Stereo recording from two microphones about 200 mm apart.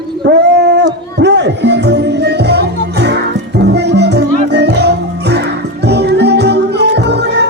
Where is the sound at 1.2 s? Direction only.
60° right (ahead or behind).